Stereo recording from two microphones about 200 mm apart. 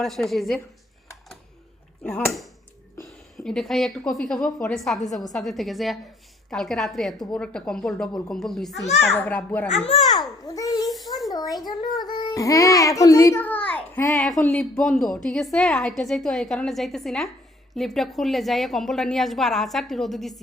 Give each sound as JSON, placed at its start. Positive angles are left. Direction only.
{"t": 0.0, "sound": "a child's voice", "side_deg": 0}
{"t": 2.0, "sound": "a child's voice", "side_deg": 5}
{"t": 9.6, "sound": "a child's voice", "side_deg": 30}
{"t": 10.1, "sound": "a sound", "side_deg": 20}
{"t": 11.3, "sound": "child singing", "side_deg": 20}
{"t": 11.8, "sound": "a child's voice", "side_deg": 20}